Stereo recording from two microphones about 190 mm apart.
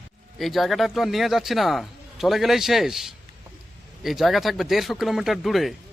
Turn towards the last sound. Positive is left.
turn(degrees=0)  # may be behind; listen again after turning